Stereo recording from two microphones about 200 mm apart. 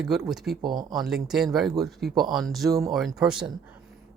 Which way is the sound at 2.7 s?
15° right (ahead or behind).